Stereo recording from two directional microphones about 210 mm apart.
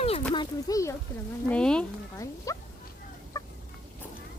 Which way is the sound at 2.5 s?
15° left (ahead or behind).